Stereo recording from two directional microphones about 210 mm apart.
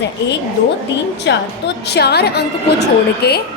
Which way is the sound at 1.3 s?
55° left (ahead or behind).